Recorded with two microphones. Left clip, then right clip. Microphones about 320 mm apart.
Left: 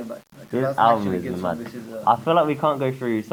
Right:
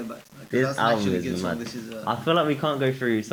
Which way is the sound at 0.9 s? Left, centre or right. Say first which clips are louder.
Left 3 dB; left.